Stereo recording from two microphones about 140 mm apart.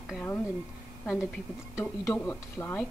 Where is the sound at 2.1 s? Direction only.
10° left (ahead or behind).